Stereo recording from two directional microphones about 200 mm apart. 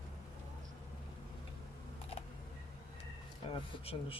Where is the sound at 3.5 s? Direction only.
25° left (ahead or behind).